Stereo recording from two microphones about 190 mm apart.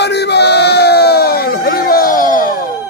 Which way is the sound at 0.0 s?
60° left (ahead or behind).